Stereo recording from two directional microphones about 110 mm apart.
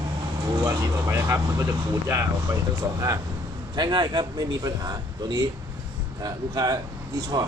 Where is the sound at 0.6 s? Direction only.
25° right (ahead or behind).